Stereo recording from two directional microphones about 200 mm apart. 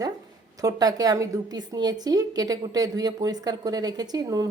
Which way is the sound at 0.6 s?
20° right (ahead or behind).